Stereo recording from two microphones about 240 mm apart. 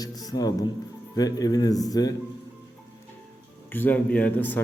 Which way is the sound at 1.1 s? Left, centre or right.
Centre.